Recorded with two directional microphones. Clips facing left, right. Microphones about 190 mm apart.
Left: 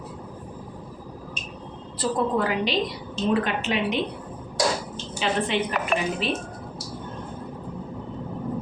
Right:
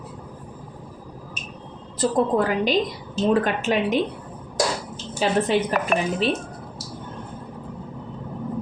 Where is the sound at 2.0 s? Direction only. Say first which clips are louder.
Right 4 dB; 45° right (ahead or behind).